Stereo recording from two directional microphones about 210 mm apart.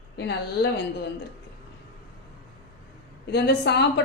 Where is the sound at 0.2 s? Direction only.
50° left (ahead or behind).